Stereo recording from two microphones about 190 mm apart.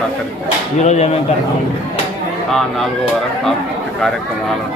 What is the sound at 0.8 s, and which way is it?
Speech, 35° left (ahead or behind).